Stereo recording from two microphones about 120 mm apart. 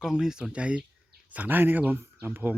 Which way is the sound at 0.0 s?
5° right (ahead or behind).